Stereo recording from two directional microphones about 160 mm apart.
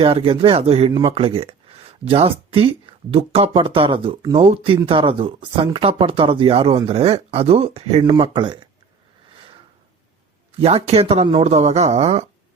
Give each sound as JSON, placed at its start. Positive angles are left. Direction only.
{"t": 0.0, "sound": "speech", "side_deg": -35}
{"t": 8.1, "sound": "speech", "side_deg": -30}
{"t": 9.3, "sound": "a sound", "side_deg": -30}
{"t": 10.6, "sound": "speech", "side_deg": -40}